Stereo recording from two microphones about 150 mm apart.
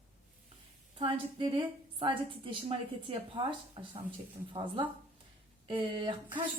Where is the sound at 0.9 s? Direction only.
35° right (ahead or behind).